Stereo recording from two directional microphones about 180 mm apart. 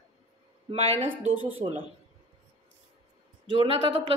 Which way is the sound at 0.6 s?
35° right (ahead or behind).